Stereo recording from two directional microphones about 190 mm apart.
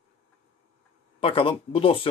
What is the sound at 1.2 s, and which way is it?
Speech, 30° left (ahead or behind).